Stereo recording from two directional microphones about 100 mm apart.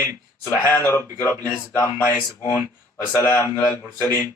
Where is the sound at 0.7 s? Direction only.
20° left (ahead or behind).